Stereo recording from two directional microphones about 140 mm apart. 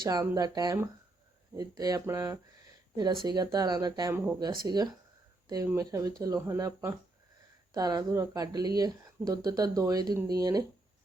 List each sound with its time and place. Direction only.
0.0 s speech: 30° right (ahead or behind)